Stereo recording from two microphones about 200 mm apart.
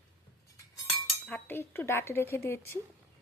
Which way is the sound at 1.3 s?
10° left (ahead or behind).